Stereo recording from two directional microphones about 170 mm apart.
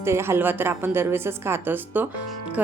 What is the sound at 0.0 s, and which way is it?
A woman's voice, 15° right (ahead or behind).